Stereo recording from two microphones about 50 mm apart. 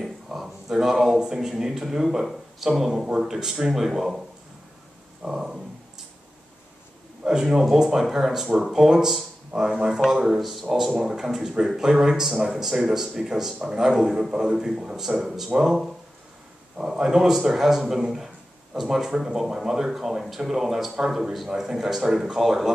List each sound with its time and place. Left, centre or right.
0.0 s speech: centre
5.2 s a sound: centre
7.2 s a man's voice: centre